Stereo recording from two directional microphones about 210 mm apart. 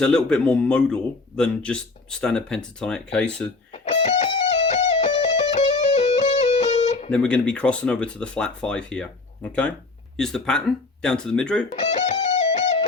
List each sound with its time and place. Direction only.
0.0 s speech: 5° left (ahead or behind)
3.7 s music: 30° left (ahead or behind)
7.1 s speech: 5° left (ahead or behind)
11.7 s music: 35° left (ahead or behind)